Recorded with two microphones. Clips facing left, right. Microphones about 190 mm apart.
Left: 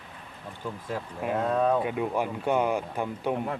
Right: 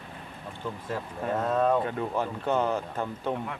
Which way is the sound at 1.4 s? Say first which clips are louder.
Even; centre (ahead or behind).